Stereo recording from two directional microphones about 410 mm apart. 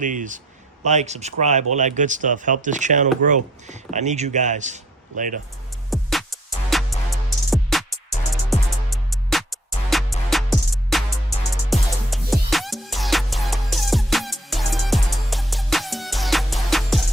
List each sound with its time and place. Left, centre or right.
0.0 s speech: centre
5.9 s music: centre